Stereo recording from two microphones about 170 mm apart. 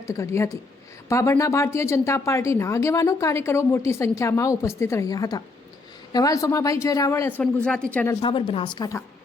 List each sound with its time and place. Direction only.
0.1 s speech: 15° left (ahead or behind)
8.2 s speech: 30° left (ahead or behind)